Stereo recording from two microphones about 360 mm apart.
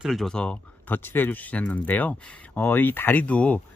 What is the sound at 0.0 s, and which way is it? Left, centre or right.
Speech, centre.